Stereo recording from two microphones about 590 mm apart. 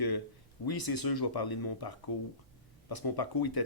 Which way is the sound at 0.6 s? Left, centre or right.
Left.